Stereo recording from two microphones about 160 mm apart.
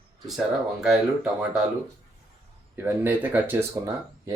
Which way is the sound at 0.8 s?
5° right (ahead or behind).